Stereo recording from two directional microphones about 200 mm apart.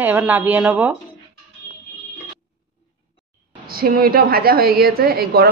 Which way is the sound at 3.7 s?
50° right (ahead or behind).